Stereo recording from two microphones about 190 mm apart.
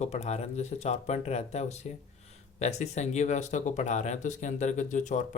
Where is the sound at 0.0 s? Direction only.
35° left (ahead or behind).